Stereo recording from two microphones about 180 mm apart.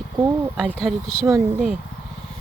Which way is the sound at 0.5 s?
Centre (ahead or behind).